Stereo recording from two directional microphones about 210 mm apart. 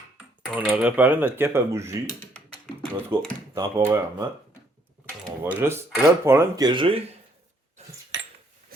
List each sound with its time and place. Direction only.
0.5 s speech: 5° right (ahead or behind)
3.1 s speech: 20° right (ahead or behind)
5.4 s speech: 10° right (ahead or behind)
7.8 s cutlery: 30° right (ahead or behind)